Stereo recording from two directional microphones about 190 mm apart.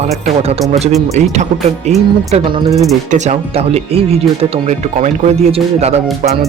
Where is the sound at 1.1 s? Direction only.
35° right (ahead or behind).